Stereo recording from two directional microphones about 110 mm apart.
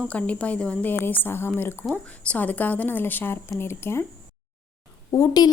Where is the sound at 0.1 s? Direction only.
10° left (ahead or behind).